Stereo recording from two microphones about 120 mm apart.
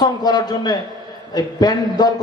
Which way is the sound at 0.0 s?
35° left (ahead or behind).